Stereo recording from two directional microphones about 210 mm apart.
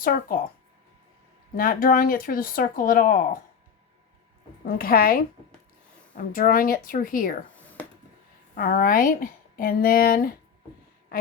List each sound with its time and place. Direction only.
0.0 s speech: 40° left (ahead or behind)
1.5 s speech: 45° left (ahead or behind)
4.6 s a woman's voice: 45° left (ahead or behind)
8.5 s speech: 40° left (ahead or behind)